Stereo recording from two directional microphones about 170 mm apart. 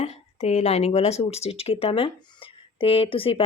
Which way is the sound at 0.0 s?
40° left (ahead or behind).